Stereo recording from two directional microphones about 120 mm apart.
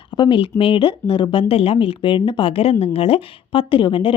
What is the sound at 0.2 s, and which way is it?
Speech, 45° left (ahead or behind).